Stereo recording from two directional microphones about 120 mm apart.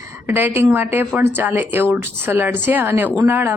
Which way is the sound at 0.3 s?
20° right (ahead or behind).